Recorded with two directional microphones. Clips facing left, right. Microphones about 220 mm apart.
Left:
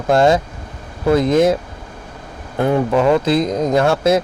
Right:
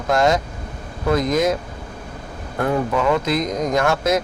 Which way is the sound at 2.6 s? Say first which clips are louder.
Left 5 dB; 30° left (ahead or behind).